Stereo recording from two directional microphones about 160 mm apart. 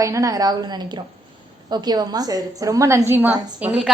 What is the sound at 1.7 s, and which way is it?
A woman's voice, 25° right (ahead or behind).